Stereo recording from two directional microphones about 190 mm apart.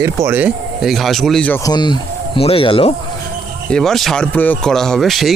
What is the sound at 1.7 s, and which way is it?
Speech, 25° left (ahead or behind).